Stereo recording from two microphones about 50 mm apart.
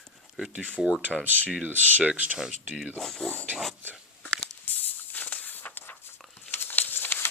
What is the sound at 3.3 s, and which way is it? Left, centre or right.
Pig, left.